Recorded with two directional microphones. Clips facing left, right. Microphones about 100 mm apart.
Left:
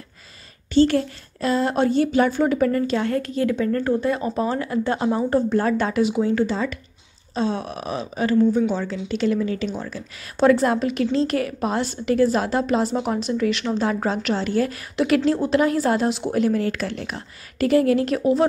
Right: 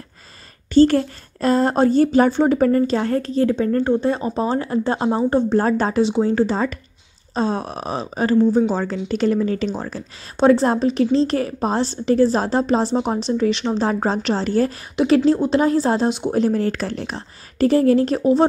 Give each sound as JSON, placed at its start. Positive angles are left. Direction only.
{"t": 0.7, "sound": "a woman's voice", "side_deg": -40}
{"t": 10.3, "sound": "a woman's voice", "side_deg": -25}
{"t": 16.3, "sound": "a woman's voice", "side_deg": -35}